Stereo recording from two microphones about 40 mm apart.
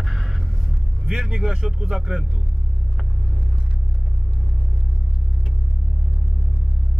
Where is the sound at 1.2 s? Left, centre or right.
Centre.